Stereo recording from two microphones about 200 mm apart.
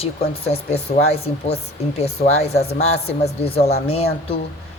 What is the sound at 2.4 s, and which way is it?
Speech, 55° left (ahead or behind).